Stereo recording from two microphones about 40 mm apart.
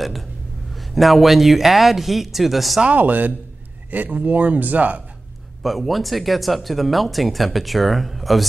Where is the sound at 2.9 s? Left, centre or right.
Right.